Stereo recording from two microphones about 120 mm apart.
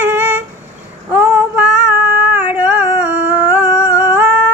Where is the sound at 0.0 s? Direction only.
15° right (ahead or behind).